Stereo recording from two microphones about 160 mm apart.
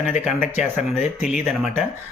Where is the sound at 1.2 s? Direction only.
Centre (ahead or behind).